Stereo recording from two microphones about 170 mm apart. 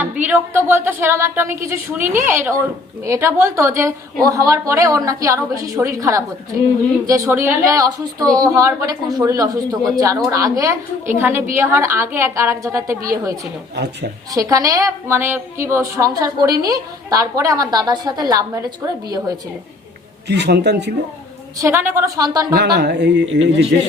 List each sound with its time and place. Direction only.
0.0 s a woman's voice: 10° right (ahead or behind)
13.7 s speech: 75° right (ahead or behind)
14.3 s a woman's voice: 20° right (ahead or behind)
20.2 s a man's voice: 90° right
21.6 s a woman's voice: 15° right (ahead or behind)
22.5 s a man's voice: 75° right (ahead or behind)